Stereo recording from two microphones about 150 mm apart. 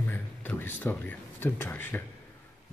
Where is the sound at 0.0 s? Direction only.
15° left (ahead or behind).